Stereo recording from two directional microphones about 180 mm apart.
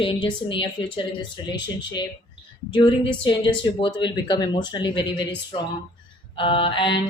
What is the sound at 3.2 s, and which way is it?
A woman's voice, 25° left (ahead or behind).